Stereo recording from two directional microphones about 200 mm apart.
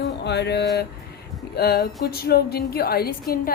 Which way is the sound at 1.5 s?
50° left (ahead or behind).